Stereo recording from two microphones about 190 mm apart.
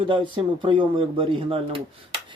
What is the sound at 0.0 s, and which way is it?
Speech, 25° right (ahead or behind).